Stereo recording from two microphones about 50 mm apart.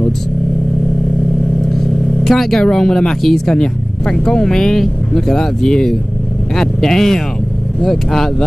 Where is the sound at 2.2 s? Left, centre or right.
Centre.